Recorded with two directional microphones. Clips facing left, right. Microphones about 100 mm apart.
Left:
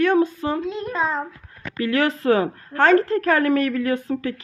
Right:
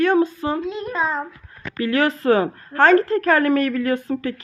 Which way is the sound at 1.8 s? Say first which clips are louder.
Right 1 dB; 35° right (ahead or behind).